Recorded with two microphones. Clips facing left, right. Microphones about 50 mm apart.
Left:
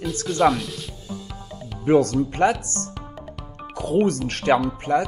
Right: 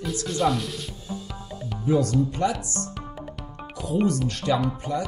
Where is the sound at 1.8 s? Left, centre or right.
Left.